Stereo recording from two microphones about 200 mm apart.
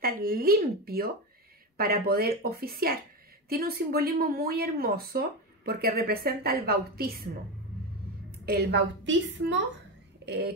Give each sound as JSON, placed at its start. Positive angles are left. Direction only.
{"t": 0.0, "sound": "speech", "side_deg": -45}
{"t": 8.3, "sound": "speech", "side_deg": -50}